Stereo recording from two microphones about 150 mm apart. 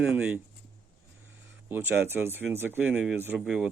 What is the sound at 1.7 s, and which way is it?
Speech, 15° right (ahead or behind).